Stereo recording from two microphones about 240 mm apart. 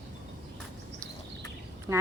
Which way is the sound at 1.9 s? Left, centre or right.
Centre.